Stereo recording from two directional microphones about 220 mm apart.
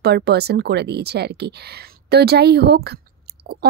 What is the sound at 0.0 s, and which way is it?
Speech, 50° right (ahead or behind).